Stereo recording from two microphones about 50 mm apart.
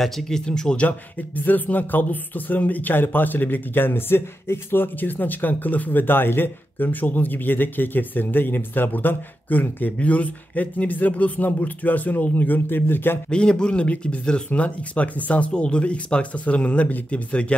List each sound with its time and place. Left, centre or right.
0.0 s speech: centre
0.5 s speech: centre
0.8 s speech: left
13.3 s speech: centre